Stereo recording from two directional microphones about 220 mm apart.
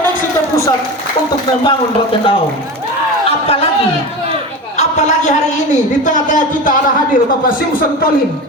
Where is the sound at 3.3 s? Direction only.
25° left (ahead or behind).